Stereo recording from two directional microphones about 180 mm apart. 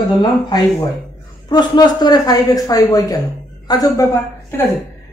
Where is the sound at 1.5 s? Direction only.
20° left (ahead or behind).